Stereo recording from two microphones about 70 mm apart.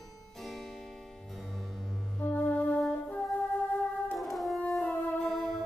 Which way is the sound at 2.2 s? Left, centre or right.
Left.